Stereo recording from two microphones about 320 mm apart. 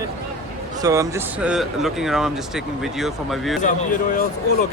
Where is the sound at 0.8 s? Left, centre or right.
Centre.